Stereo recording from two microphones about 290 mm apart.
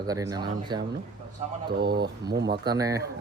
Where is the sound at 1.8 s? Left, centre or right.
Right.